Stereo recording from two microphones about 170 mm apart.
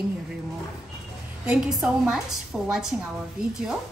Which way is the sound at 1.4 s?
5° right (ahead or behind).